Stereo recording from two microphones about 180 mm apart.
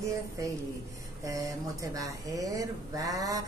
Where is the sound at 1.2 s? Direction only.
20° right (ahead or behind).